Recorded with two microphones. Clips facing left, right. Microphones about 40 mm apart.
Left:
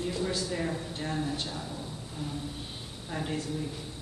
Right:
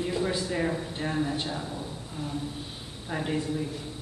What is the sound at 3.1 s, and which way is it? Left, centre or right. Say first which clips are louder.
Speech: right 4 dB; centre.